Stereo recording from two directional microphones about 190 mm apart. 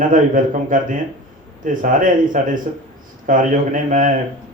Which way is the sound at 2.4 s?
45° right (ahead or behind).